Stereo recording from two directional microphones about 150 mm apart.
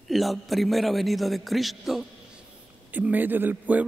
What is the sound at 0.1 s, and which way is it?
A man's voice, centre (ahead or behind).